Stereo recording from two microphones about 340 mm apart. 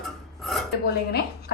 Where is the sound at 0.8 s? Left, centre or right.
Left.